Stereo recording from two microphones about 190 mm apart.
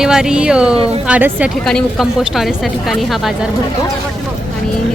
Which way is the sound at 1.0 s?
10° right (ahead or behind).